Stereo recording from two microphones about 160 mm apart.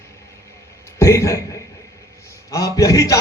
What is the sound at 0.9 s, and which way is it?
Speech, 15° left (ahead or behind).